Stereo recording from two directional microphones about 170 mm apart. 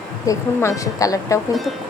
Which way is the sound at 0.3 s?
20° left (ahead or behind).